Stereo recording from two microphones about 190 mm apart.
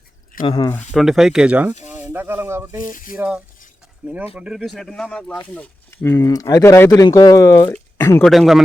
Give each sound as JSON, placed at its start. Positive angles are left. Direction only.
{"t": 0.4, "sound": "speech", "side_deg": 25}
{"t": 0.7, "sound": "speech", "side_deg": 5}
{"t": 2.9, "sound": "speech", "side_deg": 45}
{"t": 3.2, "sound": "speech", "side_deg": -5}
{"t": 8.2, "sound": "speech", "side_deg": 0}